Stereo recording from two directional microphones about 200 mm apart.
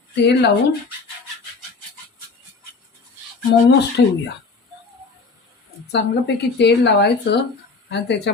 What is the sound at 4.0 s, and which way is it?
Speech, 60° left (ahead or behind).